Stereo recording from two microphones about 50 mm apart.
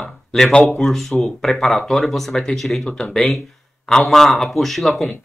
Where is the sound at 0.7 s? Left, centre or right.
Centre.